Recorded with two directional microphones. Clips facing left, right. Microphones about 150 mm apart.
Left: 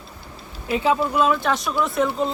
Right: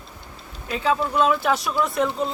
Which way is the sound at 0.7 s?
20° left (ahead or behind).